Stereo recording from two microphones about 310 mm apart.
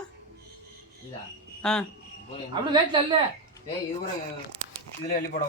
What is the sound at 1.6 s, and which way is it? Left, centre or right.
Speech, centre.